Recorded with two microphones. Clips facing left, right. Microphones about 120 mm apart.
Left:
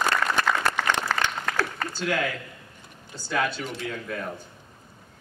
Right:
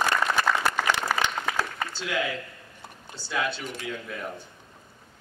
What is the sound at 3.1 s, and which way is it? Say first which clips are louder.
Speech: left 2 dB; 45° left (ahead or behind).